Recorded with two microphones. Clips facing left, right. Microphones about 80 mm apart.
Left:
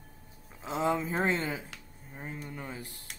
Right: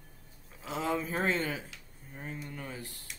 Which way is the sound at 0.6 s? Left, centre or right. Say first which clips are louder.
Left 3 dB; left.